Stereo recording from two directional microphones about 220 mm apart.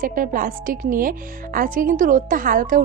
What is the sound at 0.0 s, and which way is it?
A woman's voice, 40° right (ahead or behind).